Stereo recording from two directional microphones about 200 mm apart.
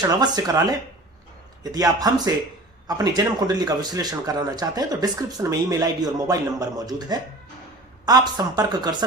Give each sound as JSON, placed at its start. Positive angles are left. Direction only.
{"t": 0.0, "sound": "a man's voice", "side_deg": -20}